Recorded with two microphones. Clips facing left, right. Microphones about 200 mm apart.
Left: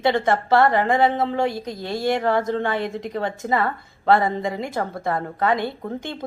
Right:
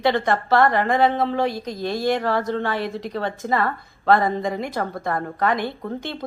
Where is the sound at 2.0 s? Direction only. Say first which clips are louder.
Left 2 dB; 15° left (ahead or behind).